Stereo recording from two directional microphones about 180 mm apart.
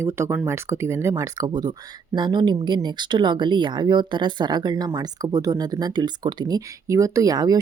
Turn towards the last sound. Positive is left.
turn(degrees=-20)  # may be behind; listen again after turning